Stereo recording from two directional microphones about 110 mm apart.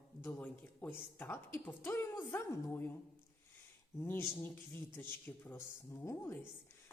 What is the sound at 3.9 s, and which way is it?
A woman's voice, 25° left (ahead or behind).